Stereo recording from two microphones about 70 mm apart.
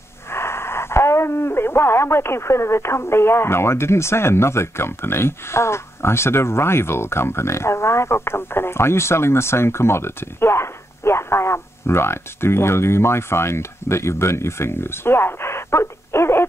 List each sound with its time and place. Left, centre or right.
0.3 s speech: left